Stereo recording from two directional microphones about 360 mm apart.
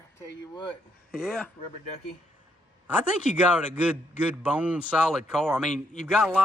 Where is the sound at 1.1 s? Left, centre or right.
Centre.